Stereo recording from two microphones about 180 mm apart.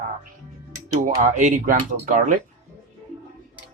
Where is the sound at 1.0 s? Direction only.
45° right (ahead or behind).